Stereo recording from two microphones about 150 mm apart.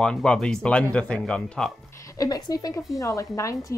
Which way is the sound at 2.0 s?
20° left (ahead or behind).